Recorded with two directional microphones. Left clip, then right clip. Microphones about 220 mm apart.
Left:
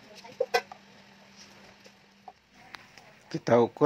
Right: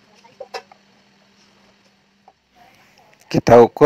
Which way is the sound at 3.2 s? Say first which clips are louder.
Right 14 dB; 35° right (ahead or behind).